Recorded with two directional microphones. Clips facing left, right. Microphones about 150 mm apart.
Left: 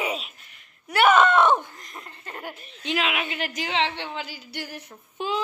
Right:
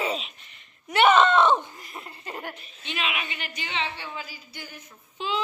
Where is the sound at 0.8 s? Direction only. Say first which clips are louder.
Even; 5° left (ahead or behind).